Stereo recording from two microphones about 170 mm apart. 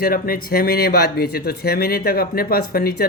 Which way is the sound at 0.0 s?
60° left (ahead or behind).